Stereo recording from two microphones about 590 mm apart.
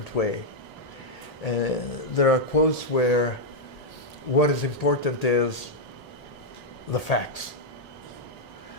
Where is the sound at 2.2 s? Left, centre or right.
Left.